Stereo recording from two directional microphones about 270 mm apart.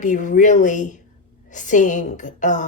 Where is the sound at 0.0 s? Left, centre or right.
Left.